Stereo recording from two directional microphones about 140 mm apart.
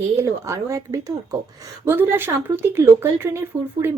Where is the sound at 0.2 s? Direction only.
20° right (ahead or behind).